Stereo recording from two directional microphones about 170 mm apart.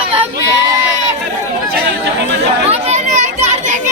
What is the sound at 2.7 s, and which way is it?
Children playing, 35° right (ahead or behind).